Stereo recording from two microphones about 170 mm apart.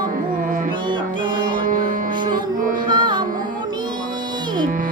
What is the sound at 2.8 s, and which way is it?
Carnatic music, 25° right (ahead or behind).